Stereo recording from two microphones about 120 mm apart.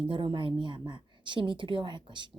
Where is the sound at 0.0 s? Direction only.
45° right (ahead or behind).